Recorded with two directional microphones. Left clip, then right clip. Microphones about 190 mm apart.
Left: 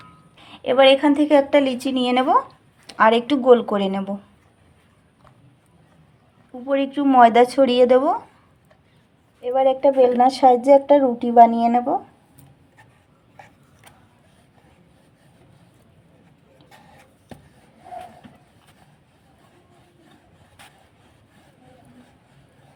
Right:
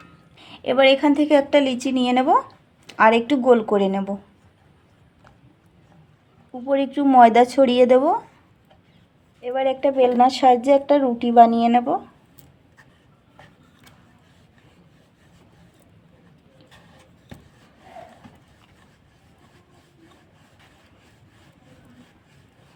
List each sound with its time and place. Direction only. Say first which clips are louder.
0.3 s a woman's voice: left 2 dB; 10° right (ahead or behind)
6.5 s a woman's voice: even; 10° right (ahead or behind)
9.4 s a woman's voice: left 4 dB; centre (ahead or behind)